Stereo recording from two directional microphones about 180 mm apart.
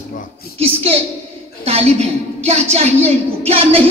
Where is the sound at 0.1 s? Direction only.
45° left (ahead or behind).